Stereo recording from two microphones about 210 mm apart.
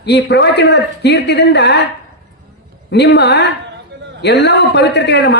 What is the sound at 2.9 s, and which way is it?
Speech, 50° left (ahead or behind).